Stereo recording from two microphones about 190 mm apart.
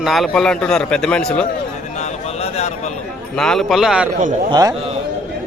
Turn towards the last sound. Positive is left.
turn(degrees=-20)  # may be behind; listen again after turning